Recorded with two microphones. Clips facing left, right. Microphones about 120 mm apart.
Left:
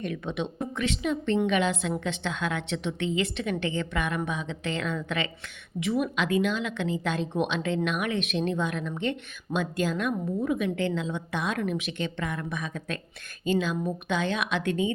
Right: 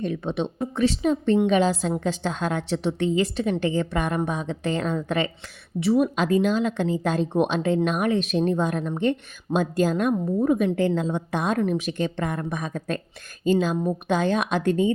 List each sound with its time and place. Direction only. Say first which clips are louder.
0.0 s speech: right 5 dB; 30° right (ahead or behind)